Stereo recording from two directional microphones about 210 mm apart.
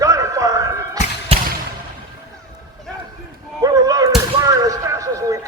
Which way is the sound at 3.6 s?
15° right (ahead or behind).